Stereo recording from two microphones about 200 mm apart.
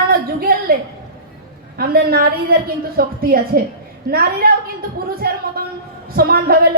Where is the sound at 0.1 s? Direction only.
50° right (ahead or behind).